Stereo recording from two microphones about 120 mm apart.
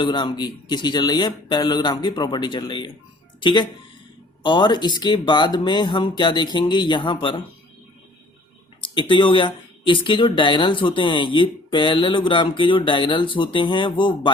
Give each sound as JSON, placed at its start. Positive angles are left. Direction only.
{"t": 0.0, "sound": "speech", "side_deg": 40}
{"t": 8.8, "sound": "speech", "side_deg": 40}